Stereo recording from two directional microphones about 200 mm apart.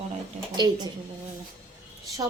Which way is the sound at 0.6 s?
20° right (ahead or behind).